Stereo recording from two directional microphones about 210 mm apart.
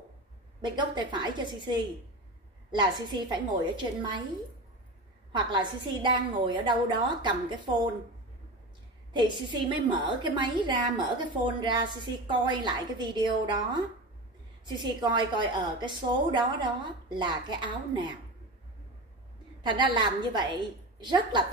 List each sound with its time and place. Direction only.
0.6 s a woman's voice: 20° right (ahead or behind)
5.3 s a woman's voice: 20° right (ahead or behind)
9.5 s a woman's voice: 20° right (ahead or behind)
14.8 s a woman's voice: 20° right (ahead or behind)
19.6 s a woman's voice: 20° right (ahead or behind)